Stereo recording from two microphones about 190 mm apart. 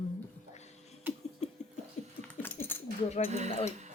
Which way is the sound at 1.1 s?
10° right (ahead or behind).